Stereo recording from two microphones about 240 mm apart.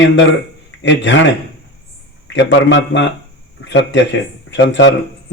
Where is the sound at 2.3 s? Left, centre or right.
Left.